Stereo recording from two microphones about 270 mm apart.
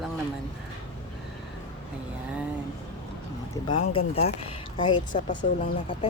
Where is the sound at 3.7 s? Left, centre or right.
Left.